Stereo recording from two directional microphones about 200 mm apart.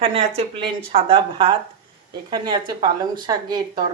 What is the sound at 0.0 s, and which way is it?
A woman's voice, 30° right (ahead or behind).